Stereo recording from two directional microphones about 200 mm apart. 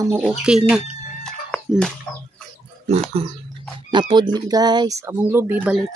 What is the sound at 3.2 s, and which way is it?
Speech, 30° right (ahead or behind).